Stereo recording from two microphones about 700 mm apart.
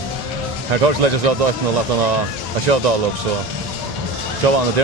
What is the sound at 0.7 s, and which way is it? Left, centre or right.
Speech, right.